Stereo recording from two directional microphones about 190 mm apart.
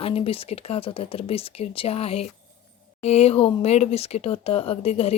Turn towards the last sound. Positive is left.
turn(degrees=35)  # may be behind; listen again after turning